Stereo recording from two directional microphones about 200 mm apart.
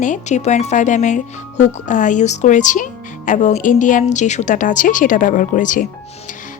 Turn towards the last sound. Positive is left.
turn(degrees=40)  # may be behind; listen again after turning